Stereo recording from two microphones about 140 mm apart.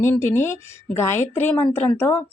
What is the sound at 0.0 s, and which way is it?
Speech, 15° left (ahead or behind).